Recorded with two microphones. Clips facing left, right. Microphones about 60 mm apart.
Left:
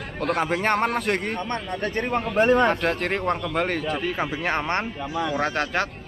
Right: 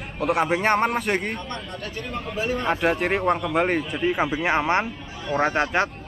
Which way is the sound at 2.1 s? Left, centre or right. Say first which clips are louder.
Left 8 dB; left.